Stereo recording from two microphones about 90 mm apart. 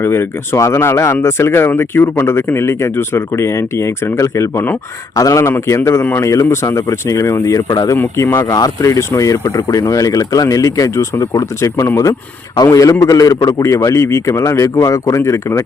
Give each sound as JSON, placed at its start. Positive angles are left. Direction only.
{"t": 0.0, "sound": "speech", "side_deg": 25}